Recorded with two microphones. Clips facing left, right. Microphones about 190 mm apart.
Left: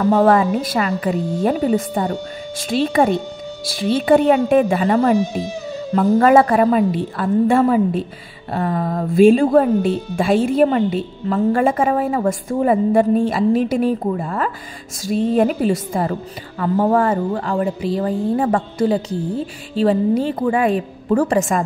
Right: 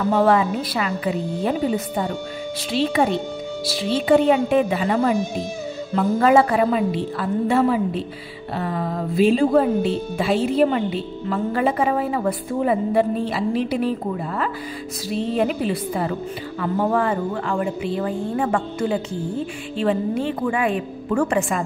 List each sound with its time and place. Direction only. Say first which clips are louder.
0.0 s a woman's voice: left 4 dB; 35° left (ahead or behind)
0.5 s a woman's voice: left 5 dB; 45° left (ahead or behind)